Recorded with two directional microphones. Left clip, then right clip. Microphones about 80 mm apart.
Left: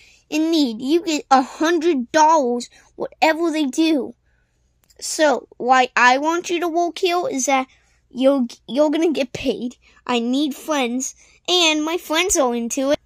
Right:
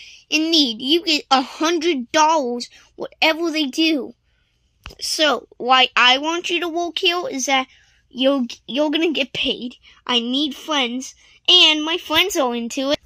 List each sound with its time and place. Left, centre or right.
0.3 s a woman's voice: left
5.0 s a woman's voice: left
8.5 s speech: centre
9.1 s a woman's voice: left
9.4 s a woman's voice: left
9.7 s a woman's voice: left
12.3 s speech: centre